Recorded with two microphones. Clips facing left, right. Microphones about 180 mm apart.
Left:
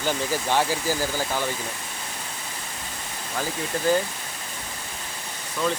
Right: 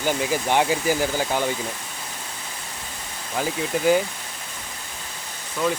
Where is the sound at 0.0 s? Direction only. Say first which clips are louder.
Right 3 dB; 15° right (ahead or behind).